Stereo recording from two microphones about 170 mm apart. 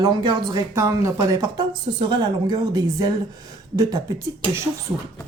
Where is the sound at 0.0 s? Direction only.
25° right (ahead or behind).